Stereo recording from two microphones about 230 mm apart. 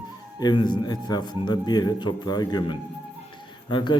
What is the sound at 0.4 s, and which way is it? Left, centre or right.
A man's voice, centre.